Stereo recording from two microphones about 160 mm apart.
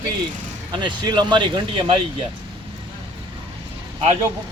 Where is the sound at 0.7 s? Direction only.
30° right (ahead or behind).